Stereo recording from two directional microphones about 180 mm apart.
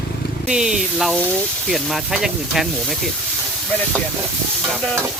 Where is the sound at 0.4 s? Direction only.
5° right (ahead or behind).